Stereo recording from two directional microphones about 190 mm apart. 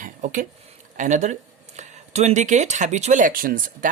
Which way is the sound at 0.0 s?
40° right (ahead or behind).